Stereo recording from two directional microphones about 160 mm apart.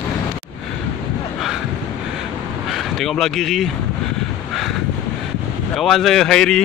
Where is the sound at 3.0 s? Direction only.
Centre (ahead or behind).